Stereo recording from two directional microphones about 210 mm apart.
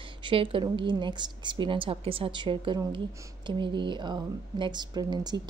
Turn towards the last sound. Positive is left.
turn(degrees=-20)  # may be behind; listen again after turning